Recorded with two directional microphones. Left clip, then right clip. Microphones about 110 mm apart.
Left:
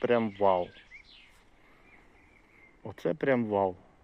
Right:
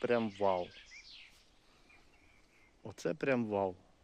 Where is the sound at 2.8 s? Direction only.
25° right (ahead or behind).